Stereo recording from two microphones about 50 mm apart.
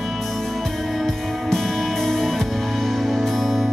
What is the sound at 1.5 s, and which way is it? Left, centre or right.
Music, centre.